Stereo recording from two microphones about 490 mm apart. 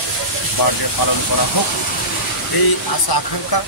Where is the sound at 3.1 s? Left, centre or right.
Left.